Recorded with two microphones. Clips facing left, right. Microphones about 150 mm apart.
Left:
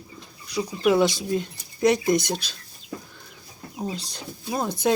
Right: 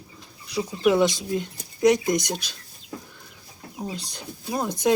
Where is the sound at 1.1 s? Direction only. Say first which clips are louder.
Left 1 dB; 20° right (ahead or behind).